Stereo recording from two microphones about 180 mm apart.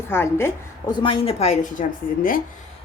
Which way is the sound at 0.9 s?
25° left (ahead or behind).